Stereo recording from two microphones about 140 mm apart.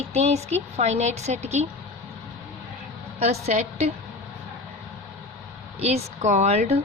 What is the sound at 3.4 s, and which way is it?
Speech, 55° right (ahead or behind).